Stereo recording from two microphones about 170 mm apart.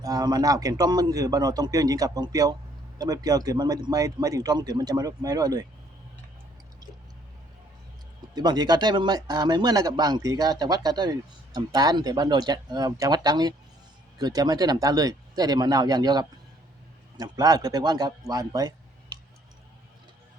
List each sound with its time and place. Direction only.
0.0 s speech: 20° right (ahead or behind)
8.4 s a man's voice: 25° right (ahead or behind)